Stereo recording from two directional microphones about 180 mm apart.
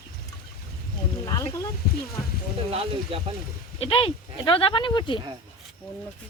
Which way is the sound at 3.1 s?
30° right (ahead or behind).